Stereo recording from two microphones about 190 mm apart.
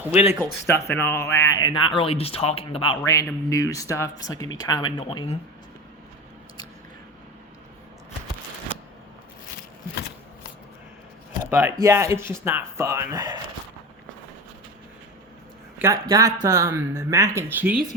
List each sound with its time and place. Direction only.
0.0 s speech: 10° right (ahead or behind)
0.4 s speech: 15° left (ahead or behind); by 3.0 s 30° left (ahead or behind)
3.0 s speech: 15° left (ahead or behind)
11.5 s speech: 15° right (ahead or behind)
15.8 s speech: 15° right (ahead or behind)